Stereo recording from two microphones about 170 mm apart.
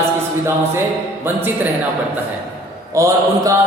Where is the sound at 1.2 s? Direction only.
10° right (ahead or behind).